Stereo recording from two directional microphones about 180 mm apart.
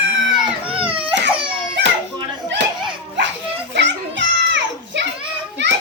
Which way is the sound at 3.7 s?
80° right.